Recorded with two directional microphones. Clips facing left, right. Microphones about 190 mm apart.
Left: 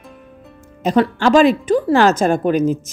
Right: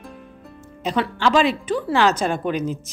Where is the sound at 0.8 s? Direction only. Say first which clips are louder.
Left 6 dB; 45° left (ahead or behind).